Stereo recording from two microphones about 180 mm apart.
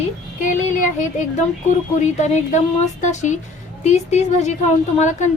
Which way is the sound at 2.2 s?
40° left (ahead or behind).